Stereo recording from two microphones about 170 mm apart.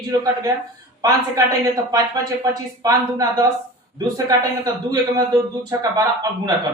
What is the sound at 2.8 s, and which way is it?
Speech, 20° right (ahead or behind).